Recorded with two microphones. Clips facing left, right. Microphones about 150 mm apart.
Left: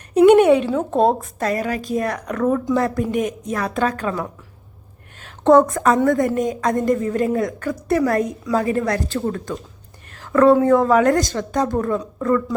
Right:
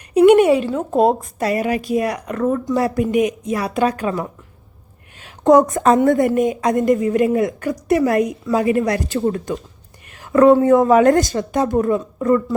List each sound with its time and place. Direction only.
0.1 s a woman's voice: 5° right (ahead or behind)